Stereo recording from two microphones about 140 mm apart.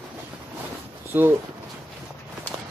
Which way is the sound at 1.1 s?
15° right (ahead or behind).